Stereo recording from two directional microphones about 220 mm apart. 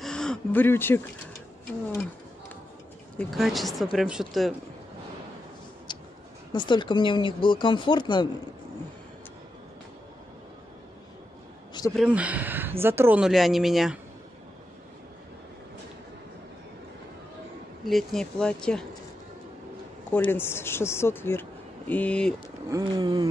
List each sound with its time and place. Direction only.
0.0 s a sound: 5° left (ahead or behind)
3.2 s speech: centre (ahead or behind)
5.9 s a sound: 20° left (ahead or behind)
6.5 s speech: 20° left (ahead or behind)
12.0 s speech: 5° right (ahead or behind)
17.8 s speech: centre (ahead or behind)
20.1 s speech: 10° left (ahead or behind)
22.7 s speech: 15° right (ahead or behind)